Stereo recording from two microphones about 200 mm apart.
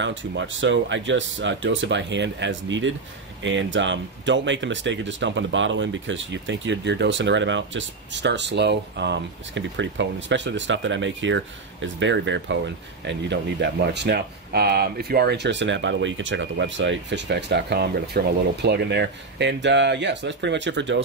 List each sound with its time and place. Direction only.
0.0 s speech: 70° right (ahead or behind)